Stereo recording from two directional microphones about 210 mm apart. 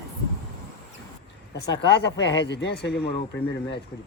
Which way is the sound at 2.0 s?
55° left (ahead or behind).